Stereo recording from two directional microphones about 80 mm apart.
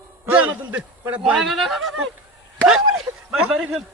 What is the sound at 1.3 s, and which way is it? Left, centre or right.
A man's voice, centre.